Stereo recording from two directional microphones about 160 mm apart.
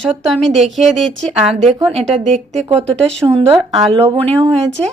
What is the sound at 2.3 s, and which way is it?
Speech, 35° right (ahead or behind).